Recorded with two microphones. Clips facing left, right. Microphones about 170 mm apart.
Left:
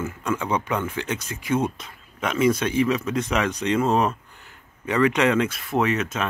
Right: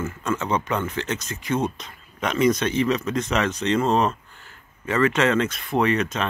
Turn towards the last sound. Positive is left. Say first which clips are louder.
# right 1 dB
turn(degrees=5)  # may be behind; listen again after turning